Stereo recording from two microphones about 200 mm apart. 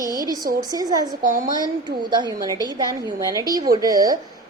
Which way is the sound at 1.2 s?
40° right (ahead or behind).